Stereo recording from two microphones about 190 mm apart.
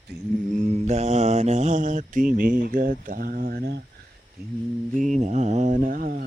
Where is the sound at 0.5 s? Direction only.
35° right (ahead or behind); by 3.8 s 55° right (ahead or behind).